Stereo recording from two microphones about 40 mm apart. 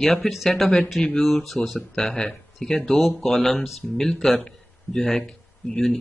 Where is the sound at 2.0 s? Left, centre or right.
Centre.